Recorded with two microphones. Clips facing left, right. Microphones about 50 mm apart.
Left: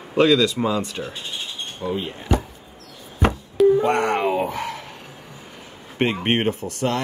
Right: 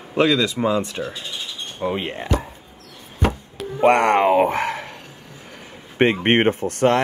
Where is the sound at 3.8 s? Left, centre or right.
Right.